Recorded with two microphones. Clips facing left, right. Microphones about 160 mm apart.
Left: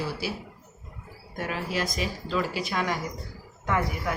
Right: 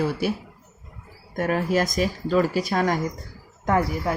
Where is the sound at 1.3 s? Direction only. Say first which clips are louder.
Right 8 dB; 50° right (ahead or behind).